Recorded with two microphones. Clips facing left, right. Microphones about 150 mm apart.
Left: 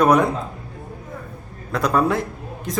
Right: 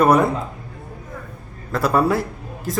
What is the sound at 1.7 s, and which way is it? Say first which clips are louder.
A man's voice: right 1 dB; 5° right (ahead or behind).